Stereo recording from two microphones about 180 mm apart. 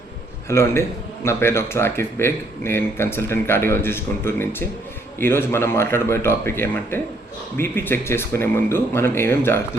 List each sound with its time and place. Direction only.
0.4 s a man's voice: 15° left (ahead or behind)